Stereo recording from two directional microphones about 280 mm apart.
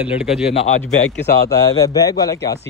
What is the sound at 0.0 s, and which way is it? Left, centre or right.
Speech, centre.